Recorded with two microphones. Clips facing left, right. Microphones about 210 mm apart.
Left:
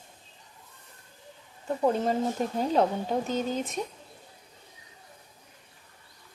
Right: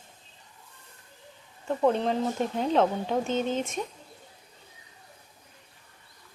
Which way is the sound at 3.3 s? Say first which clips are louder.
Right 2 dB; 25° right (ahead or behind).